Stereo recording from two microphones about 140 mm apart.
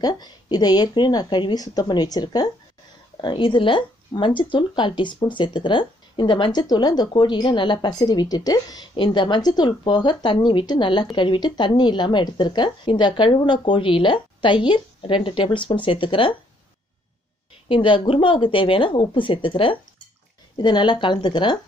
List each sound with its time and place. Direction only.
0.0 s a woman's voice: 30° left (ahead or behind)
17.6 s a woman's voice: 35° left (ahead or behind)